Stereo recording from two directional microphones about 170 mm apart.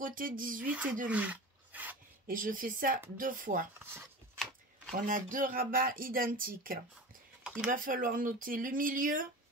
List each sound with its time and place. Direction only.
0.0 s speech: 55° right (ahead or behind)
0.7 s speech: 10° right (ahead or behind)
1.0 s roar: 10° right (ahead or behind)
2.2 s speech: 55° right (ahead or behind)
4.9 s speech: 50° right (ahead or behind)